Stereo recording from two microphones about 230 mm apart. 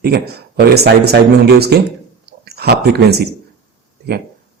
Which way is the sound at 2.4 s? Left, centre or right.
Right.